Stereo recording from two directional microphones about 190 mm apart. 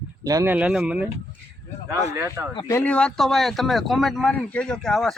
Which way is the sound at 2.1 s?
15° right (ahead or behind).